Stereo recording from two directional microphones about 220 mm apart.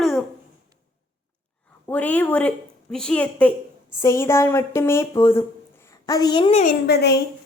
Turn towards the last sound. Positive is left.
turn(degrees=50)  # may be behind; listen again after turning